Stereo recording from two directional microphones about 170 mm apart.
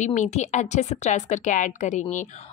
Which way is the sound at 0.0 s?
45° left (ahead or behind).